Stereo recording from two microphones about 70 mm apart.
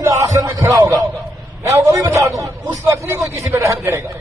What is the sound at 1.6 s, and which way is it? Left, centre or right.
A man's voice, right.